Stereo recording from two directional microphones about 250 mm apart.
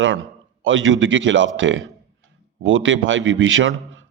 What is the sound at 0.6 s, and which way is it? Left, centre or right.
A man's voice, right.